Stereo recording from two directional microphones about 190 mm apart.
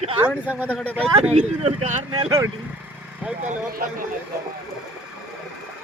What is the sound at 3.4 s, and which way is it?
Speech, 45° right (ahead or behind).